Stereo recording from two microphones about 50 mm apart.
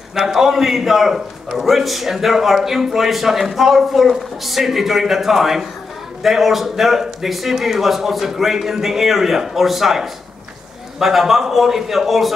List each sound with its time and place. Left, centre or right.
0.1 s a man's voice: centre